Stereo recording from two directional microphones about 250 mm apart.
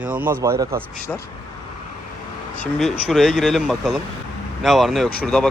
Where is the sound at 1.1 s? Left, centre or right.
Centre.